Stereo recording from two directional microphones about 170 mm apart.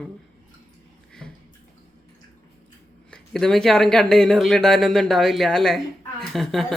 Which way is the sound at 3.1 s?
Centre (ahead or behind).